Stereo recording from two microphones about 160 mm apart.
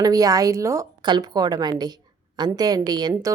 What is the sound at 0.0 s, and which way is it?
Speech, 20° right (ahead or behind).